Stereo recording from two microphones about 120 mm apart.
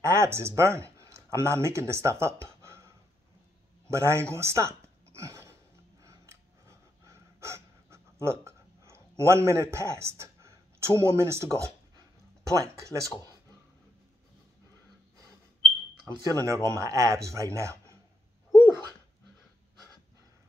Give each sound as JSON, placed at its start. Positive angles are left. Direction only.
{"t": 0.0, "sound": "speech", "side_deg": -25}
{"t": 3.9, "sound": "a sound", "side_deg": -25}
{"t": 7.1, "sound": "gasp", "side_deg": -25}
{"t": 12.4, "sound": "a man's voice", "side_deg": -25}
{"t": 16.2, "sound": "a man's voice", "side_deg": -30}